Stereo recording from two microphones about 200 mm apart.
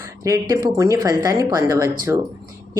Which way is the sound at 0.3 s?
15° right (ahead or behind).